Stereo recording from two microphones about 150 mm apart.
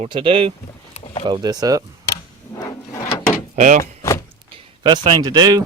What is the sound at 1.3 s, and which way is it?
Speech, 25° right (ahead or behind).